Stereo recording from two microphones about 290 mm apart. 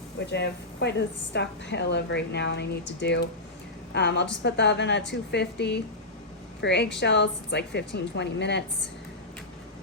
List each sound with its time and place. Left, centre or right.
0.3 s a woman's voice: left